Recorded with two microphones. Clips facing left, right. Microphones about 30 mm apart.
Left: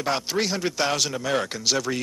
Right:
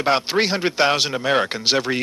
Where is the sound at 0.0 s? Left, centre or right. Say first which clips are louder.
Right 6 dB; right.